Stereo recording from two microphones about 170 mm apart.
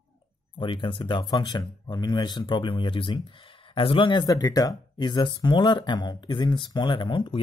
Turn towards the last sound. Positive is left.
turn(degrees=30)  # may be behind; listen again after turning